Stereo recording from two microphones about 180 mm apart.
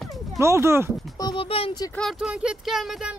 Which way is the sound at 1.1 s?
25° left (ahead or behind).